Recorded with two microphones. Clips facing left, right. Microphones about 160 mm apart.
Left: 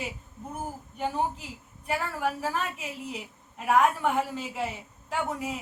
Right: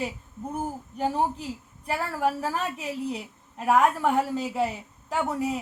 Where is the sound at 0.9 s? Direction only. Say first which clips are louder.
Right 3 dB; 35° right (ahead or behind).